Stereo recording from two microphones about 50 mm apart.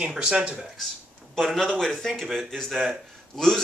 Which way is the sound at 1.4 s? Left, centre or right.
Centre.